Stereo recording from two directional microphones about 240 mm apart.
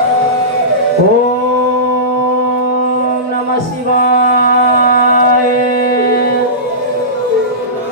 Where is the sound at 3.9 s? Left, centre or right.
Left.